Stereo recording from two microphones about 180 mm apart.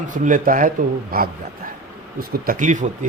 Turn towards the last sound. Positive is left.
turn(degrees=-45)  # may be behind; listen again after turning